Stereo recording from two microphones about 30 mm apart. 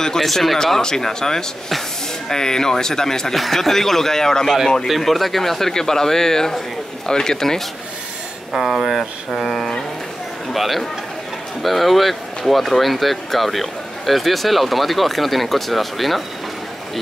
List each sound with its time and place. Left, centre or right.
0.2 s speech: centre
0.7 s speech: centre
3.3 s speech: centre
4.8 s speech: centre
5.7 s speech: centre
8.5 s speech: centre
9.4 s a sound: centre
10.5 s a man's voice: centre